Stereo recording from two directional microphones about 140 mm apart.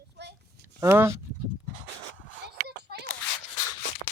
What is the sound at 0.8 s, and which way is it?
Speech, 20° right (ahead or behind).